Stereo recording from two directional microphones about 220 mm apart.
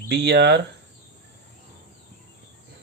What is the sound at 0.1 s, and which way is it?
Speech, 50° right (ahead or behind).